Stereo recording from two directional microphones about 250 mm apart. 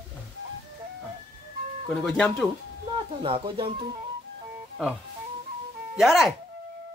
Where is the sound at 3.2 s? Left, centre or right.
Right.